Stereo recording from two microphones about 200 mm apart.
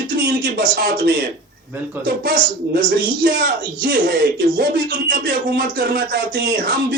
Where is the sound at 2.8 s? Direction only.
55° right (ahead or behind).